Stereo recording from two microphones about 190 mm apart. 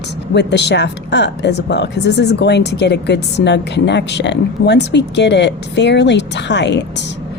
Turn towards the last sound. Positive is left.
turn(degrees=65)  # may be behind; listen again after turning